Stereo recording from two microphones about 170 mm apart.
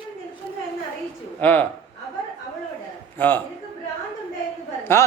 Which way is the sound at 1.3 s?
10° left (ahead or behind).